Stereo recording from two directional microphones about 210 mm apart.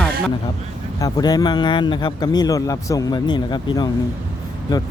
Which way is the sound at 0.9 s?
15° left (ahead or behind).